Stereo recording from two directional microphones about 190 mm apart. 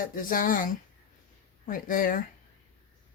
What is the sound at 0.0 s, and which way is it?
Speech, 45° left (ahead or behind).